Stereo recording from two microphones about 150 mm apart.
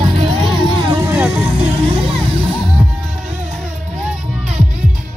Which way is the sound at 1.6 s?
40° right (ahead or behind).